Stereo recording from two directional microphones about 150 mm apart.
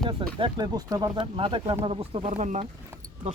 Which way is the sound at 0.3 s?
30° right (ahead or behind).